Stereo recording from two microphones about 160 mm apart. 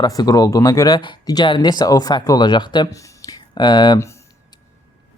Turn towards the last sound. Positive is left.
turn(degrees=20)  # may be behind; listen again after turning